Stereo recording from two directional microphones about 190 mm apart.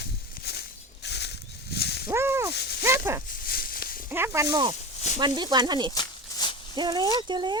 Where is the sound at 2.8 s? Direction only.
15° right (ahead or behind).